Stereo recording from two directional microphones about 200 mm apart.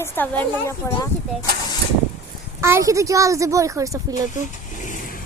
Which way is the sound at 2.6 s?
15° right (ahead or behind).